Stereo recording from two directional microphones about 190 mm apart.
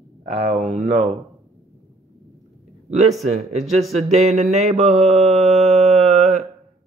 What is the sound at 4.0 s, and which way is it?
Mantra, 35° right (ahead or behind).